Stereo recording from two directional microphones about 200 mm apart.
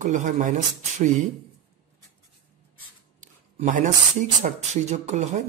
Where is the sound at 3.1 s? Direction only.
40° right (ahead or behind).